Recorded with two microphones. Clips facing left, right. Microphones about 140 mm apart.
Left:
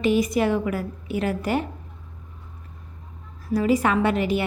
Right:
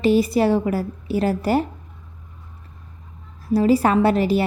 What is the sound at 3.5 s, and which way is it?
Speech, 35° right (ahead or behind).